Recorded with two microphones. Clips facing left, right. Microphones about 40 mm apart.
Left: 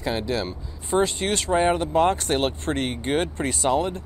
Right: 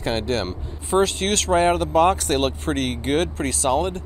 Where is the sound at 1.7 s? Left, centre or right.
Centre.